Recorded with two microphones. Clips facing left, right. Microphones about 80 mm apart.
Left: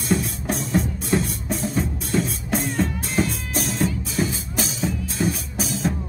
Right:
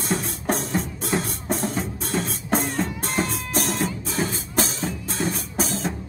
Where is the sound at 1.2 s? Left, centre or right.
Right.